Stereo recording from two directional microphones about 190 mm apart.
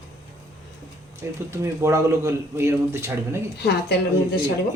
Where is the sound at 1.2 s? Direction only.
15° right (ahead or behind).